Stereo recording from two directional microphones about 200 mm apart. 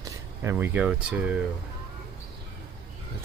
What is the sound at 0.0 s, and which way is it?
Speech, 15° right (ahead or behind).